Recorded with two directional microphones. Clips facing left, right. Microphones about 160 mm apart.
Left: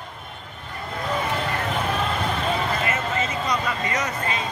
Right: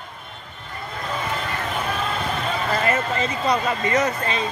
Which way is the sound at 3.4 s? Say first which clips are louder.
Right 4 dB; 30° right (ahead or behind).